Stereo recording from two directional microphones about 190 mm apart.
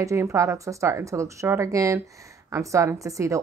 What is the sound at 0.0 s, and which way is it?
A woman's voice, 15° right (ahead or behind).